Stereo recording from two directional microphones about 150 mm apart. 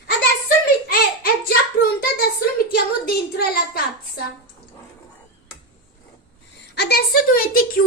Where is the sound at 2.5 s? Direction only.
90° left.